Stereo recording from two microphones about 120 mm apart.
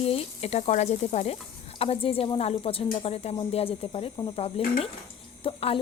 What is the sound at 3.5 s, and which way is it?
Sizzle, 55° left (ahead or behind).